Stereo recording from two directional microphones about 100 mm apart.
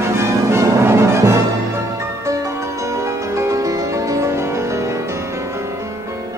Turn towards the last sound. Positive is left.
turn(degrees=-30)  # may be behind; listen again after turning